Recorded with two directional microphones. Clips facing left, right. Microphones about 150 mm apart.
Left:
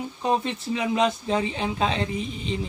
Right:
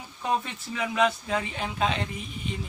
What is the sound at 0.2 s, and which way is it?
Speech, 25° left (ahead or behind).